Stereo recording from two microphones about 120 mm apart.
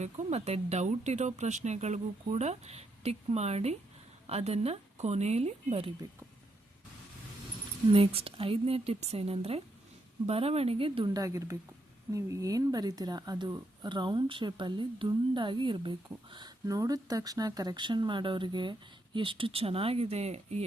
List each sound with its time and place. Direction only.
0.0 s speech: 65° right (ahead or behind)
7.9 s speech: 50° right (ahead or behind)
11.1 s speech: 30° right (ahead or behind); by 20.7 s 60° right (ahead or behind)